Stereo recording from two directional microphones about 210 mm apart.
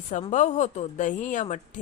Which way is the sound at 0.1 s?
35° left (ahead or behind).